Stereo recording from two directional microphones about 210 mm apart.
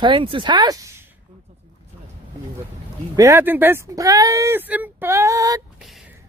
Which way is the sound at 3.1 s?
15° right (ahead or behind).